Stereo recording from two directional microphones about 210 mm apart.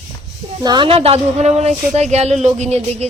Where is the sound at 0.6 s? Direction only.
20° right (ahead or behind).